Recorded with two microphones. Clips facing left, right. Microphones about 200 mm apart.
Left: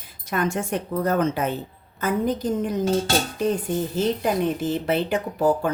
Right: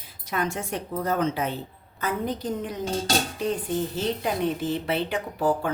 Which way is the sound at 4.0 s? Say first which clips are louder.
Left 4 dB; 45° left (ahead or behind).